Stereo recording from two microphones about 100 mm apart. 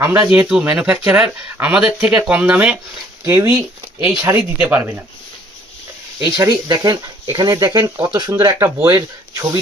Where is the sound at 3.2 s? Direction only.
25° right (ahead or behind).